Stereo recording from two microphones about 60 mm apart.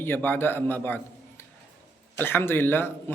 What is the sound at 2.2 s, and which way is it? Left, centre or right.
Speech, left.